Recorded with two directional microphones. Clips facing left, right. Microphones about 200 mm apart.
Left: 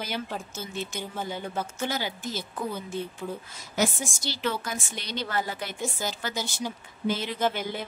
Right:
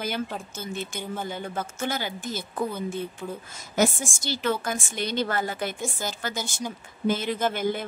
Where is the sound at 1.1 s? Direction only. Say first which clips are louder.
Right 2 dB; 10° left (ahead or behind).